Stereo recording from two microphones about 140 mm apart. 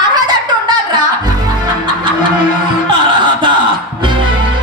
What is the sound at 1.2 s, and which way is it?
Music, 30° right (ahead or behind).